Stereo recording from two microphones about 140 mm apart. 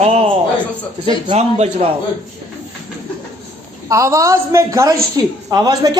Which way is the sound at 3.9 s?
20° right (ahead or behind).